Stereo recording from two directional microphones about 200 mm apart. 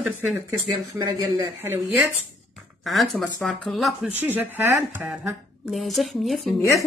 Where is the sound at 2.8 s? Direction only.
Centre (ahead or behind).